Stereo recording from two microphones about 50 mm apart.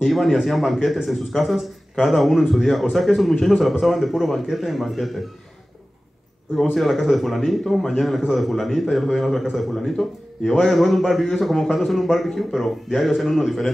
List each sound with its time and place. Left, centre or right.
0.0 s speech: centre
6.6 s speech: centre